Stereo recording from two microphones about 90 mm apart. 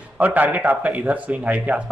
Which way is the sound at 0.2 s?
15° right (ahead or behind).